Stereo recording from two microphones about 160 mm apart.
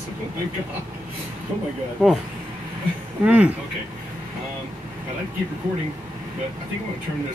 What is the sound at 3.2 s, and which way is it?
Speech, 10° right (ahead or behind).